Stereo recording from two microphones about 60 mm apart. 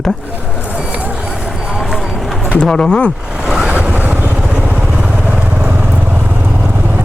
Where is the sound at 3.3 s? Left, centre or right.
Centre.